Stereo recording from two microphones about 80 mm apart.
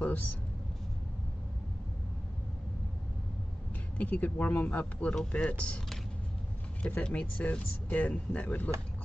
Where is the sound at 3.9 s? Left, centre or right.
Centre.